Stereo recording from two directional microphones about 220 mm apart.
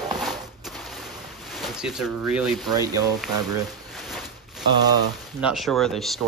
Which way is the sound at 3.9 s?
Centre (ahead or behind).